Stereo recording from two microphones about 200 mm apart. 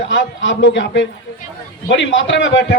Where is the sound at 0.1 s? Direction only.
70° left (ahead or behind).